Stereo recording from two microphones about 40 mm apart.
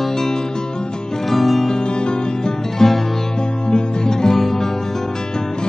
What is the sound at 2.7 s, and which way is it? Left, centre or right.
Music, centre.